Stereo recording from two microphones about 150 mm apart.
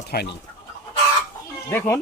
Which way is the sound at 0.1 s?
90° left.